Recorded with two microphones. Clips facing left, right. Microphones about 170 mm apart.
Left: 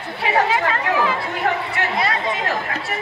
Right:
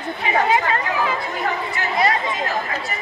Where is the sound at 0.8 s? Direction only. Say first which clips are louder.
Left 2 dB; 70° left (ahead or behind).